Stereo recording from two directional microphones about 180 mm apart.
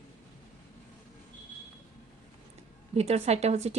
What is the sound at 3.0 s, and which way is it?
Speech, 35° right (ahead or behind).